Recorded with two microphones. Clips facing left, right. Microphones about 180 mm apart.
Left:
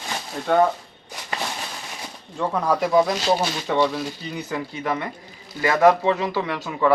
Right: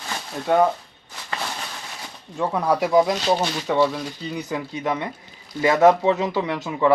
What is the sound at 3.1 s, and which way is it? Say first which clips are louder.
Speech: even; 5° left (ahead or behind).